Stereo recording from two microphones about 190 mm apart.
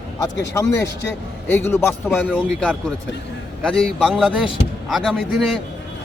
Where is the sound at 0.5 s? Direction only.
15° left (ahead or behind).